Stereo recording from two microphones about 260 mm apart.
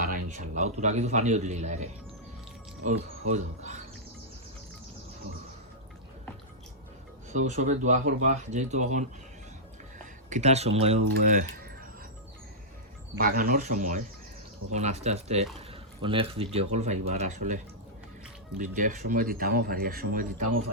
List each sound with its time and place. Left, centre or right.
0.3 s a man's voice: right
7.3 s a man's voice: right
10.2 s a man's voice: right
13.1 s a man's voice: right